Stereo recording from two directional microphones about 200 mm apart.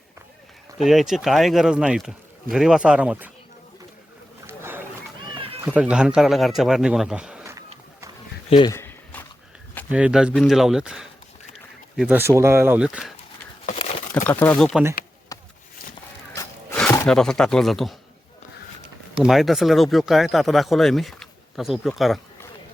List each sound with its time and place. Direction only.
0.8 s speech: centre (ahead or behind)
4.4 s a sound: 10° right (ahead or behind)
5.6 s speech: 5° right (ahead or behind)
8.4 s speech: 25° left (ahead or behind)
8.7 s walk: 10° left (ahead or behind)
9.9 s speech: 5° right (ahead or behind)
13.7 s a sound: 30° left (ahead or behind)
14.3 s speech: 10° left (ahead or behind)
15.3 s a sound: 20° left (ahead or behind)
17.1 s speech: 5° left (ahead or behind)
19.2 s speech: centre (ahead or behind)